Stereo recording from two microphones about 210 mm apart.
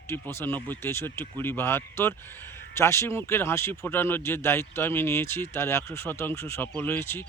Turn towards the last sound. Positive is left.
turn(degrees=10)  # may be behind; listen again after turning